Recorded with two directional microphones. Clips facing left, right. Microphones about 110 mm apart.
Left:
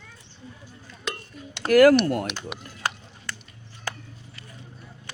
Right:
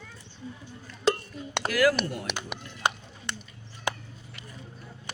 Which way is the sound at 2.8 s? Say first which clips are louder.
Right 2 dB; 20° right (ahead or behind).